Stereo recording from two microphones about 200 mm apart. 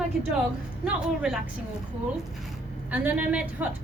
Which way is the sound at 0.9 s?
5° right (ahead or behind).